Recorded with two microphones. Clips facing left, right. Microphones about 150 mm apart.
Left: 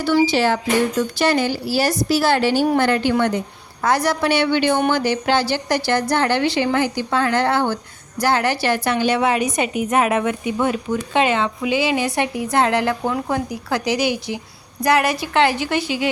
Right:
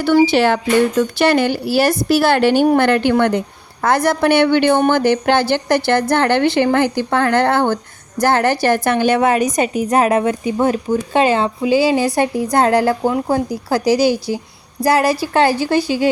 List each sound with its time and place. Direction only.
0.0 s a woman's voice: 55° right (ahead or behind); by 16.0 s 40° right (ahead or behind)